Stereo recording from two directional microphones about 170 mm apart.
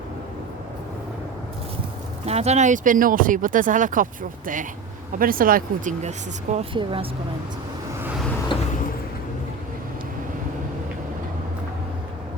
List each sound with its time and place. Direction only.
2.2 s speech: 40° right (ahead or behind)
6.7 s speech: 30° right (ahead or behind)